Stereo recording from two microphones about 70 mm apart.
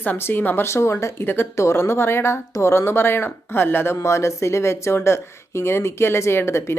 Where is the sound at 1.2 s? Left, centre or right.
Left.